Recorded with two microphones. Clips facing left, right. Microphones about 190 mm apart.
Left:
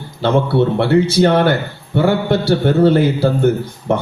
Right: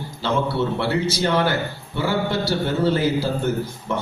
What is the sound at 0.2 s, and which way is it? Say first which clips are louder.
A man's voice: left 8 dB; 60° left (ahead or behind).